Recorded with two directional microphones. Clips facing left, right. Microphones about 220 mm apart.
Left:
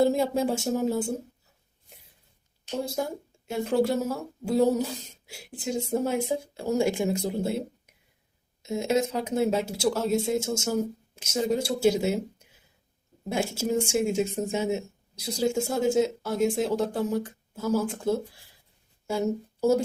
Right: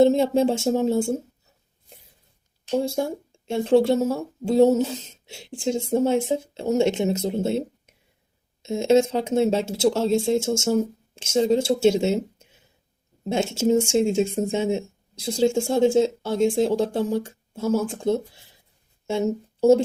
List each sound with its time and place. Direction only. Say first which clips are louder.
0.0 s speech: right 6 dB; 25° right (ahead or behind)
2.8 s speech: right 5 dB; 25° right (ahead or behind)